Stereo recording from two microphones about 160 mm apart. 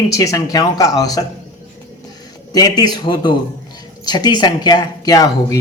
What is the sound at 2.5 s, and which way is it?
Speech, 25° left (ahead or behind).